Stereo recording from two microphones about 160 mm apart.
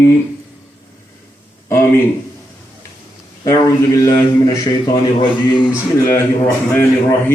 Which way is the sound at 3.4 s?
20° left (ahead or behind).